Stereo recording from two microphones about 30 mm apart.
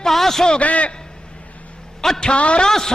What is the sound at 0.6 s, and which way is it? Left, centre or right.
Speech, left.